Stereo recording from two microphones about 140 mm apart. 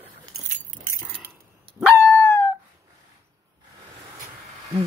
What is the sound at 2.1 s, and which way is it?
Dog, 15° left (ahead or behind).